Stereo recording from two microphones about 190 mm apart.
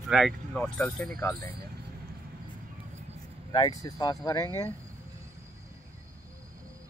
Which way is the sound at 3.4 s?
20° left (ahead or behind).